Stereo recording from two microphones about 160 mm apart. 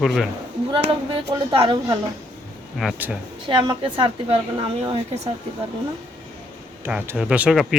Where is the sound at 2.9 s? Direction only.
10° right (ahead or behind).